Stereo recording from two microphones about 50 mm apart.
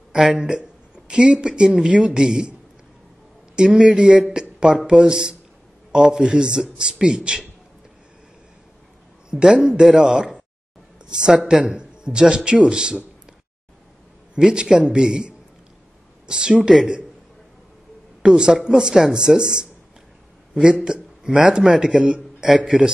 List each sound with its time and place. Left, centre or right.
0.1 s speech: centre
3.5 s speech: centre
9.3 s speech: centre
14.4 s speech: centre
18.2 s speech: centre
20.8 s a man's voice: centre